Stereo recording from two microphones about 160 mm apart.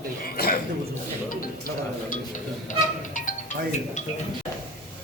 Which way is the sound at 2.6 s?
50° left (ahead or behind).